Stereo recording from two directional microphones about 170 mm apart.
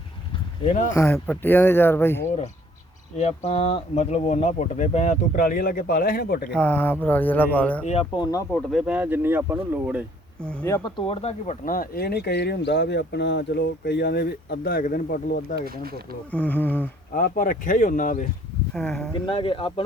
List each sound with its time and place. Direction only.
0.9 s speech: 15° left (ahead or behind)
3.2 s speech: 40° left (ahead or behind); by 6.5 s 65° left (ahead or behind)
6.6 s speech: 10° left (ahead or behind)
7.9 s speech: 35° left (ahead or behind)
8.5 s speech: 5° right (ahead or behind)
10.4 s speech: 5° left (ahead or behind)
10.9 s speech: 35° left (ahead or behind); by 15.5 s 55° left (ahead or behind)
15.5 s speech: 65° right (ahead or behind)
16.3 s speech: 10° left (ahead or behind)
17.2 s speech: 55° left (ahead or behind)
18.7 s speech: 5° left (ahead or behind)
19.1 s speech: 30° left (ahead or behind)